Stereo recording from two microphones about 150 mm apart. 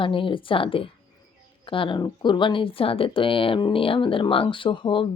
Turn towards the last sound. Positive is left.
turn(degrees=35)  # may be behind; listen again after turning